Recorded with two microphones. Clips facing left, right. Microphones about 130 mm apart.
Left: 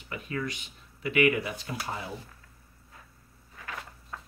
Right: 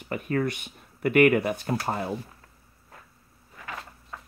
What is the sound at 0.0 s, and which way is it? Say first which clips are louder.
Speech: right 7 dB; 55° right (ahead or behind).